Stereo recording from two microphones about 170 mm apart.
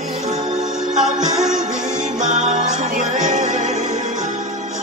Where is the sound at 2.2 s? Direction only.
45° right (ahead or behind).